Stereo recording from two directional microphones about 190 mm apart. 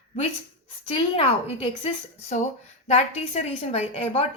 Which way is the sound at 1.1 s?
30° left (ahead or behind).